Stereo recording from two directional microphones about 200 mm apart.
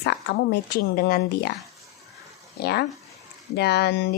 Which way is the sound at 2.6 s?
50° left (ahead or behind).